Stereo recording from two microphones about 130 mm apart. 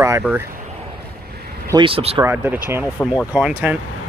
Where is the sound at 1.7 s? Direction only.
45° right (ahead or behind).